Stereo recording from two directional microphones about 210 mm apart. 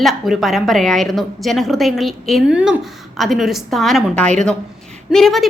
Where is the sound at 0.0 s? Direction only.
Centre (ahead or behind).